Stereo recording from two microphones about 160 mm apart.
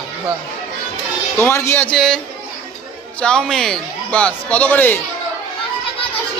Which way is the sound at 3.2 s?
5° left (ahead or behind).